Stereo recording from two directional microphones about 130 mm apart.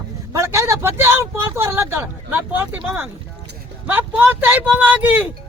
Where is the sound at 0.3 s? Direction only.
20° right (ahead or behind).